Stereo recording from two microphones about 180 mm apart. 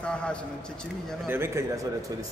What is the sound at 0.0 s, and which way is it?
Speech, 5° left (ahead or behind).